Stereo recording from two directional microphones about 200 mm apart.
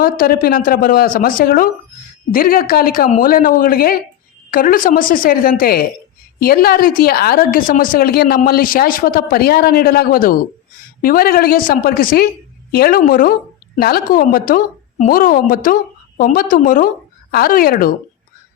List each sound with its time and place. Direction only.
0.0 s a woman's voice: 45° left (ahead or behind)